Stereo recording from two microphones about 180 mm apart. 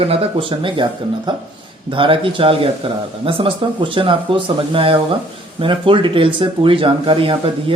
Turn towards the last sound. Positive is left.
turn(degrees=-30)  # may be behind; listen again after turning